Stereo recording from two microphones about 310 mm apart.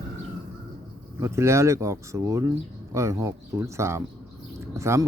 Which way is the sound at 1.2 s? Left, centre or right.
Centre.